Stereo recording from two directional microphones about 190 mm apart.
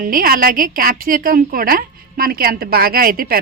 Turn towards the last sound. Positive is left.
turn(degrees=-50)  # may be behind; listen again after turning